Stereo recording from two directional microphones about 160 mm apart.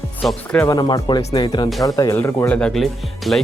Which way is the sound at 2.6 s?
5° left (ahead or behind).